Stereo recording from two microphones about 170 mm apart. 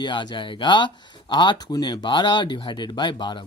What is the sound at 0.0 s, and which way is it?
Speech, 25° left (ahead or behind).